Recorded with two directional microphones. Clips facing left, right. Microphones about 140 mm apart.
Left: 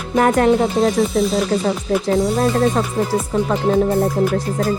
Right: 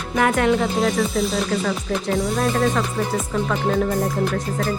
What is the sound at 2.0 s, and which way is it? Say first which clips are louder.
Music: left 4 dB; 35° left (ahead or behind).